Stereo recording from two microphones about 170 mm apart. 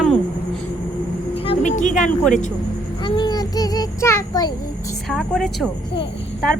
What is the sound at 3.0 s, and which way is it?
A child's voice, 25° left (ahead or behind).